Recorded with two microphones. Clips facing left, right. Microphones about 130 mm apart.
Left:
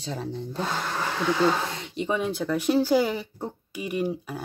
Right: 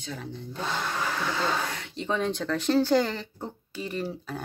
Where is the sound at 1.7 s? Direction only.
20° left (ahead or behind).